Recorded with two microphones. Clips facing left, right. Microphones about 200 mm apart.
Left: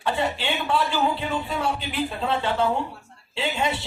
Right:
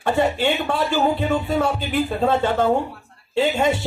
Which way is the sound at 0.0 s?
45° right (ahead or behind).